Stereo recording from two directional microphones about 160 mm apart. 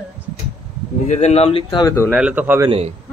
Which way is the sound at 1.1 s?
45° left (ahead or behind).